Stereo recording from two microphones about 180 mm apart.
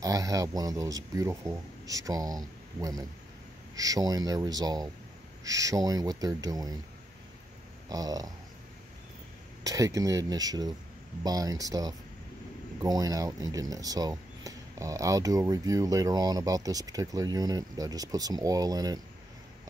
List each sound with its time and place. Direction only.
0.0 s speech: 20° right (ahead or behind)
7.9 s speech: 20° right (ahead or behind)
9.6 s speech: 20° right (ahead or behind)